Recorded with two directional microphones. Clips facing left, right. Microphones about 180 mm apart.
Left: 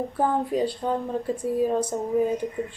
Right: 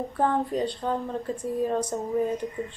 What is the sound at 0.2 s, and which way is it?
A woman's voice, 5° left (ahead or behind).